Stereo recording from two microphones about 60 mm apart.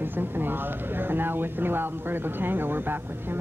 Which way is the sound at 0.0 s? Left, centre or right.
Right.